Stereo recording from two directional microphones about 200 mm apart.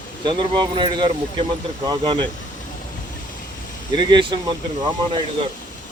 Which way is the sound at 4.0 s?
20° right (ahead or behind).